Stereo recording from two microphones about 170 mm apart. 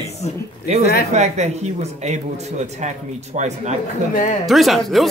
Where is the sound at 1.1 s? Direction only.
40° right (ahead or behind).